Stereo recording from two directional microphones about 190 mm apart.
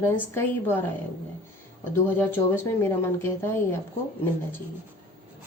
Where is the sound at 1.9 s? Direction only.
10° left (ahead or behind).